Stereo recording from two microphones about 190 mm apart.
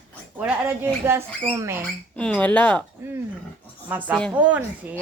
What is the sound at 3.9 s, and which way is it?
A woman's voice, 10° right (ahead or behind).